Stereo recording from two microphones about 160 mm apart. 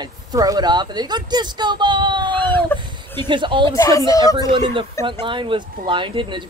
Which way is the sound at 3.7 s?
20° left (ahead or behind).